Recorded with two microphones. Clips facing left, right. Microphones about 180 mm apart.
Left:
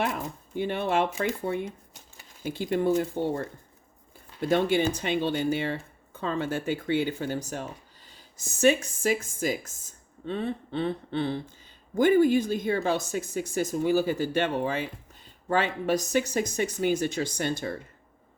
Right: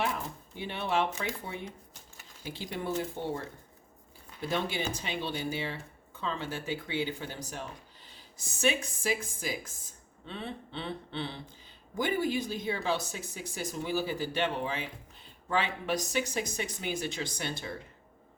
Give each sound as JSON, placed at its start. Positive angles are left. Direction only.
{"t": 0.5, "sound": "speech", "side_deg": 50}
{"t": 4.4, "sound": "speech", "side_deg": 55}